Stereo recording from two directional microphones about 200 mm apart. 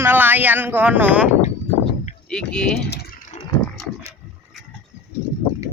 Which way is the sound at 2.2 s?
5° left (ahead or behind).